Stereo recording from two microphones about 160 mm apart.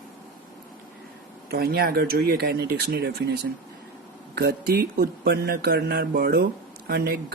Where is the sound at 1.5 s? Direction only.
80° right.